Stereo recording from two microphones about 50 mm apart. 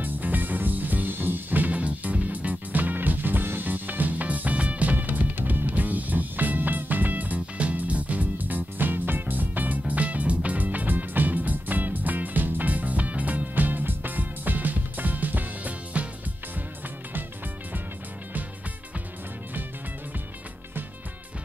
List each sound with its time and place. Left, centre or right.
0.0 s music: right